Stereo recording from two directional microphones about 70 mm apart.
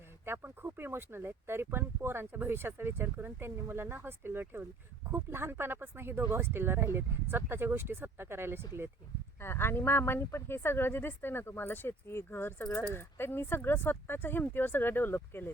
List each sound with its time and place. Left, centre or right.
0.3 s speech: right
9.4 s speech: left